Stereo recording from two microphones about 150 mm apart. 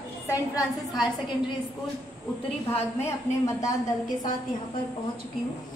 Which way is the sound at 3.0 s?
20° left (ahead or behind).